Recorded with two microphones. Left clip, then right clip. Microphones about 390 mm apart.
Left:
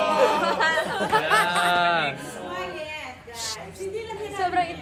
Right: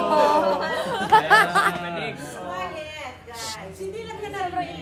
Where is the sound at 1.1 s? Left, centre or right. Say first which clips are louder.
Right 5 dB; right.